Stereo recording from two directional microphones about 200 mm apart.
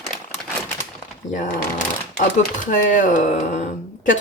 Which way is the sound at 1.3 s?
40° left (ahead or behind).